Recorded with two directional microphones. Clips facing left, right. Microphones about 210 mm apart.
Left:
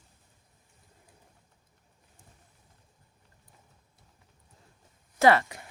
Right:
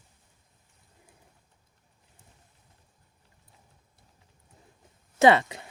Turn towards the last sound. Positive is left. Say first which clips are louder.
# right 2 dB
turn(degrees=-20)  # may be behind; listen again after turning